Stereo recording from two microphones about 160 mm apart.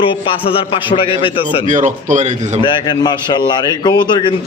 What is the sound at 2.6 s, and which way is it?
A man's voice, 30° left (ahead or behind).